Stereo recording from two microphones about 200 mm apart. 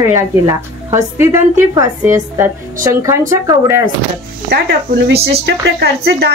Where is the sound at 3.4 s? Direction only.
15° right (ahead or behind).